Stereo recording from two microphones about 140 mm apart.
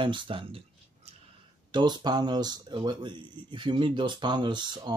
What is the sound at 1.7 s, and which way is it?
Speech, 30° right (ahead or behind).